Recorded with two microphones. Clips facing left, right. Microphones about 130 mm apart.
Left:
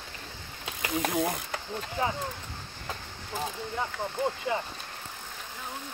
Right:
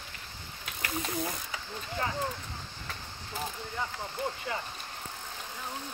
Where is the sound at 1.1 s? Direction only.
60° left (ahead or behind).